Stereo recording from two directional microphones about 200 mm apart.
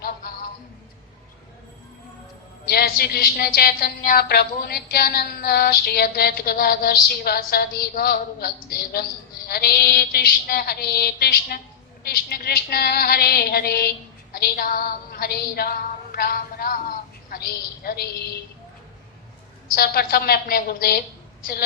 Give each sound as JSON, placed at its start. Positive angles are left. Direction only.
{"t": 2.6, "sound": "a woman's voice", "side_deg": 50}
{"t": 14.3, "sound": "a sound", "side_deg": 50}
{"t": 19.7, "sound": "a woman's voice", "side_deg": 50}